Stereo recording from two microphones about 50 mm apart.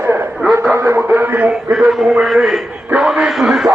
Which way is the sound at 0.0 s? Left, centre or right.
Right.